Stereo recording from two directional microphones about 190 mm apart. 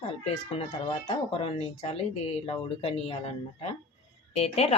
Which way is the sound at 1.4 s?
35° left (ahead or behind).